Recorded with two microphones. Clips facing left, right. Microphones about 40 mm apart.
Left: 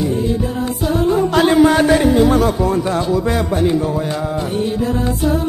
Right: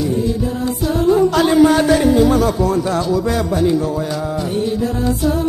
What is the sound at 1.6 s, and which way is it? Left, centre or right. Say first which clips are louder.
Speech: right 1 dB; left.